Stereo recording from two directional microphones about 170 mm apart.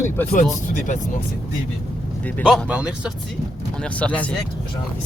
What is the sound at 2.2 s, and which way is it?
Speech, 5° left (ahead or behind).